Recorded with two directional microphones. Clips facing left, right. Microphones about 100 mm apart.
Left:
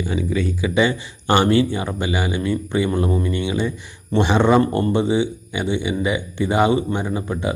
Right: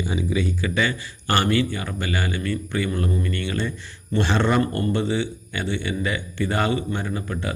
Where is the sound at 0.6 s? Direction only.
15° left (ahead or behind).